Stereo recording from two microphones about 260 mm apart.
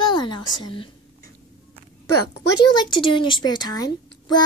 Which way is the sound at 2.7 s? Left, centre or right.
Centre.